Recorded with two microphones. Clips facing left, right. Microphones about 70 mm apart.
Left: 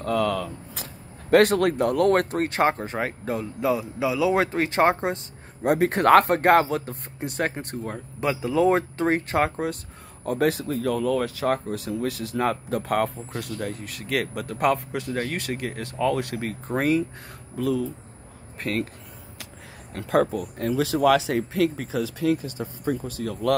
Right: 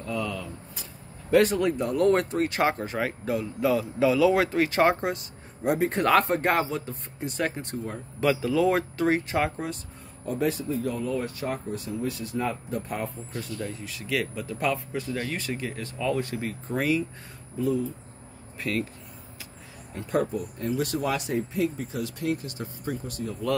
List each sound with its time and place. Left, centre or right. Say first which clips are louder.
0.0 s vehicle: left 7 dB; left
1.3 s speech: left 3 dB; left
3.7 s speech: right 3 dB; centre
5.6 s speech: left 4 dB; left
8.2 s speech: left 1 dB; left
10.2 s speech: left 4 dB; left
15.1 s speech: left 3 dB; left
17.6 s speech: left 1 dB; left
18.6 s speech: left 2 dB; left
19.9 s speech: left 5 dB; left
23.2 s speech: left 3 dB; left